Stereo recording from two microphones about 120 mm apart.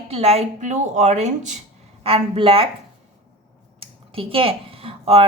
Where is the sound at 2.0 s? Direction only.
50° right (ahead or behind).